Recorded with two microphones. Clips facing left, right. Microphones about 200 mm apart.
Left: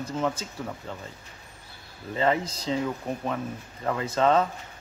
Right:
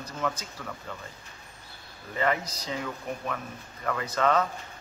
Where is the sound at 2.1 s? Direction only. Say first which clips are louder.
Left 3 dB; 25° left (ahead or behind).